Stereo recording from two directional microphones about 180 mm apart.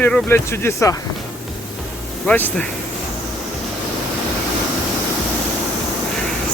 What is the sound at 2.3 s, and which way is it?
Speech, 10° left (ahead or behind).